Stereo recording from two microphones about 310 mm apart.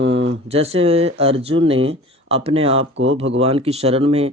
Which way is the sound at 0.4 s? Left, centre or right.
Centre.